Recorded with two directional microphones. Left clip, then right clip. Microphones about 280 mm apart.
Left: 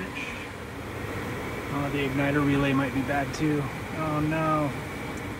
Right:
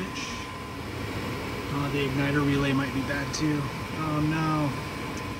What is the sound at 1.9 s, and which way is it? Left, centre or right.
Speech, centre.